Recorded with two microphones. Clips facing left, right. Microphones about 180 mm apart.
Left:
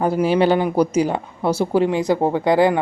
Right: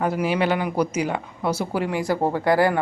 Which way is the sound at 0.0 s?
30° left (ahead or behind).